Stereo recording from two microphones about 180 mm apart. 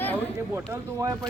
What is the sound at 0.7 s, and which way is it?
Speech, 20° right (ahead or behind).